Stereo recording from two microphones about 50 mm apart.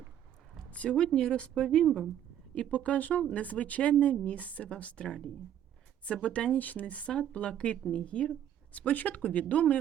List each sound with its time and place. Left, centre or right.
0.7 s a woman's voice: left
5.0 s speech: centre
6.1 s a woman's voice: left